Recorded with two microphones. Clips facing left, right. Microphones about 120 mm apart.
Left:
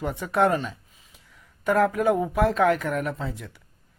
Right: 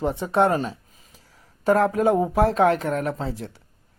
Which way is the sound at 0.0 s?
30° right (ahead or behind).